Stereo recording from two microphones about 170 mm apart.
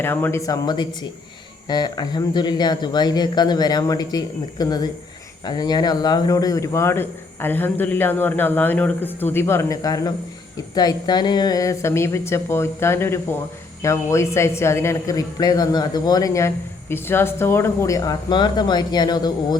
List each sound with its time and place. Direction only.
0.0 s a man's voice: 10° left (ahead or behind)